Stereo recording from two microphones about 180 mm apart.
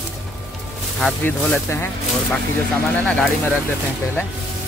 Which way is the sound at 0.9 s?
5° left (ahead or behind).